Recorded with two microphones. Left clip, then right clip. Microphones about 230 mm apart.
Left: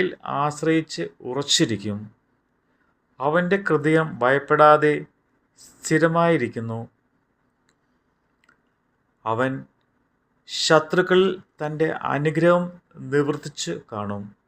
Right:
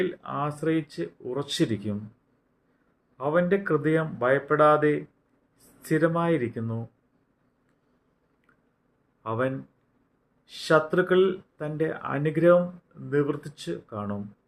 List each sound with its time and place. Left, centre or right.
0.0 s speech: left
3.2 s speech: left
9.2 s speech: left